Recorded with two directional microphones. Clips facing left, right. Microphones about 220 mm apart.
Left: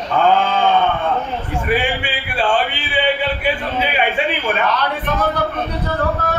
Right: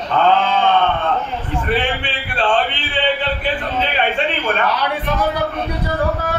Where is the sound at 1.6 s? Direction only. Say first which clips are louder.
Left 1 dB; 10° left (ahead or behind).